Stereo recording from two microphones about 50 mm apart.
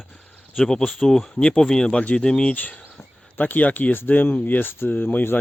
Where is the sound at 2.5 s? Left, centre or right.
Left.